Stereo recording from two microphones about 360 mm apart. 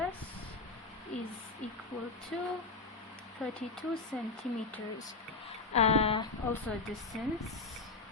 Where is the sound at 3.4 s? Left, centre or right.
Centre.